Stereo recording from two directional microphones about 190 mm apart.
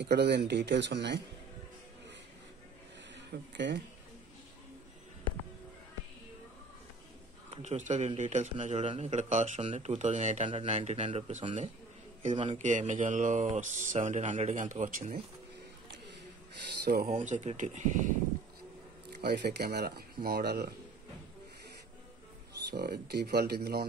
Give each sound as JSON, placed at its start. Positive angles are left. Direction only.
{"t": 0.0, "sound": "speech", "side_deg": -65}
{"t": 3.2, "sound": "speech", "side_deg": -70}
{"t": 7.5, "sound": "speech", "side_deg": -40}
{"t": 16.8, "sound": "speech", "side_deg": -50}
{"t": 19.2, "sound": "speech", "side_deg": -60}
{"t": 22.7, "sound": "speech", "side_deg": -60}